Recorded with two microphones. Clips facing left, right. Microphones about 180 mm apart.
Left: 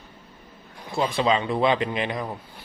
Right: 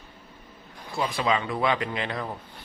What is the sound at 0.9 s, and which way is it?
Speech, 25° left (ahead or behind).